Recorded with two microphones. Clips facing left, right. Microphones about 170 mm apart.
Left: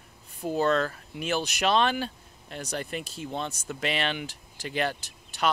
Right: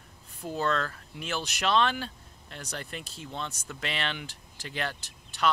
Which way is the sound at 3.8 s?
10° left (ahead or behind).